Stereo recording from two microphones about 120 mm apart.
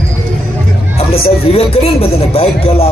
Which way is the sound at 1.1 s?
55° left (ahead or behind).